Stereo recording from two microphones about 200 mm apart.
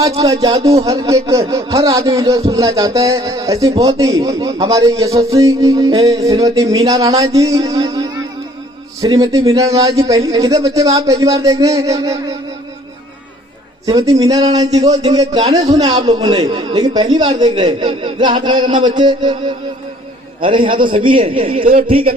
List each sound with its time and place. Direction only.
0.4 s a man's voice: 20° right (ahead or behind)
13.8 s speech: 15° right (ahead or behind)